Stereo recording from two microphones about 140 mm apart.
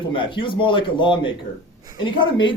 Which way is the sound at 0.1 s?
35° left (ahead or behind).